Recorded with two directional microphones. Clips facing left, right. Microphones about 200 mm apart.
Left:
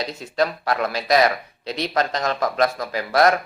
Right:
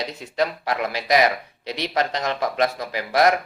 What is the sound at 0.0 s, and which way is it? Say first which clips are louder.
A man's voice: left 1 dB; 15° right (ahead or behind).